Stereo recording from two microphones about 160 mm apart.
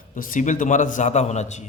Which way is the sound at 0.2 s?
55° left (ahead or behind).